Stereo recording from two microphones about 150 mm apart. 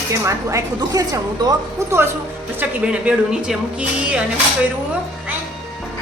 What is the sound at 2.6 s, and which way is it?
Speech, 5° right (ahead or behind).